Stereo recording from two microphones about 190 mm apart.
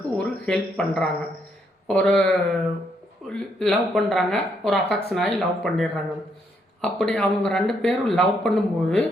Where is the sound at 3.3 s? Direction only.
5° left (ahead or behind).